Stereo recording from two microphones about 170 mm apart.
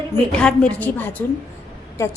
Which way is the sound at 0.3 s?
5° left (ahead or behind).